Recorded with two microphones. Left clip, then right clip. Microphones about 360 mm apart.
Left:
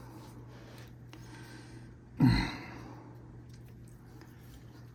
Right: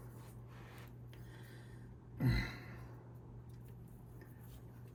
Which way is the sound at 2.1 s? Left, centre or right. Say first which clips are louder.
Left 11 dB; centre.